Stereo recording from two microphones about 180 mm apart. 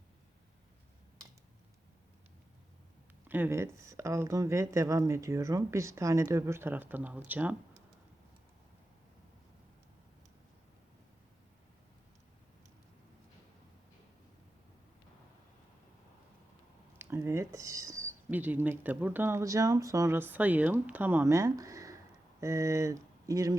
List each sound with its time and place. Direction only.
3.2 s speech: 10° right (ahead or behind)
17.0 s speech: 15° right (ahead or behind)